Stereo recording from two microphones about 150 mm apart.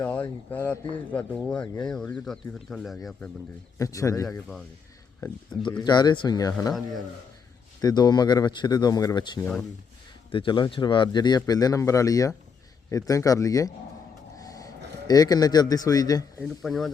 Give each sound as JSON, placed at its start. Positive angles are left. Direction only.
{"t": 0.0, "sound": "speech", "side_deg": 10}
{"t": 3.8, "sound": "speech", "side_deg": 20}
{"t": 4.3, "sound": "speech", "side_deg": 5}
{"t": 5.2, "sound": "speech", "side_deg": 25}
{"t": 7.8, "sound": "speech", "side_deg": 25}
{"t": 14.3, "sound": "a sound", "side_deg": 25}
{"t": 16.4, "sound": "speech", "side_deg": 0}